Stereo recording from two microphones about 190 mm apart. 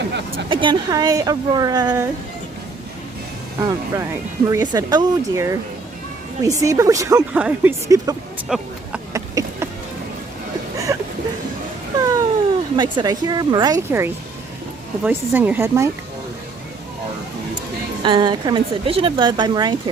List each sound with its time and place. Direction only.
0.5 s speech: 25° right (ahead or behind)
3.6 s speech: 20° right (ahead or behind)
7.3 s speech: 5° right (ahead or behind)
7.9 s speech: 20° right (ahead or behind)
8.4 s a sound: centre (ahead or behind)
9.1 s a sound: 15° right (ahead or behind)
10.9 s a sound: 15° right (ahead or behind)
11.9 s cat: 15° right (ahead or behind)
12.7 s speech: 25° right (ahead or behind)
18.0 s speech: 25° right (ahead or behind)